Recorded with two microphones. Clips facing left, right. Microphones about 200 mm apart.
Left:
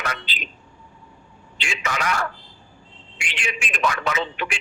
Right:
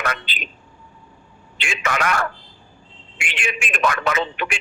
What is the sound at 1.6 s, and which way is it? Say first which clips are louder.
A man's voice: right 4 dB; 55° right (ahead or behind).